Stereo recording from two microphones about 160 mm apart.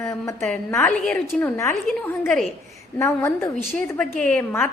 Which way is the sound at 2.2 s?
Centre (ahead or behind).